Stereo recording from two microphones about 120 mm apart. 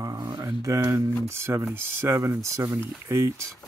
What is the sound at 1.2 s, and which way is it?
Speech, 20° right (ahead or behind).